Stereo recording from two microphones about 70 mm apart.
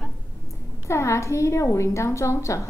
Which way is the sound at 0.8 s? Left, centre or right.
Left.